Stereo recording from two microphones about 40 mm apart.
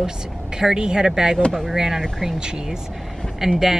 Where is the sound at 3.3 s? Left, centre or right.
Centre.